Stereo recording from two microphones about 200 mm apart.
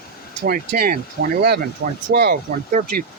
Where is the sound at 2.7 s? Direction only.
40° right (ahead or behind).